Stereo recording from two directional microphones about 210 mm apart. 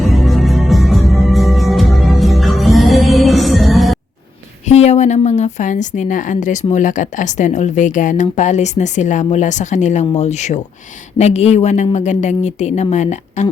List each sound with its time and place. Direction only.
0.0 s music: centre (ahead or behind)
4.7 s a woman's voice: 30° left (ahead or behind)